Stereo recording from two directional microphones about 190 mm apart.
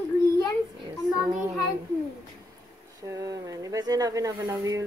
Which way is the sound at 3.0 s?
15° right (ahead or behind).